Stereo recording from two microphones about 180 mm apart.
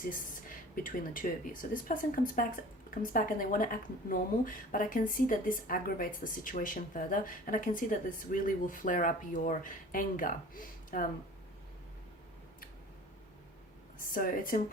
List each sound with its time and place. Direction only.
0.0 s speech: 50° left (ahead or behind)
14.1 s speech: 50° left (ahead or behind)